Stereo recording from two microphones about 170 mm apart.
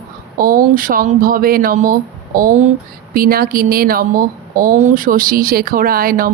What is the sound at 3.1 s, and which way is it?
Speech, 60° right (ahead or behind).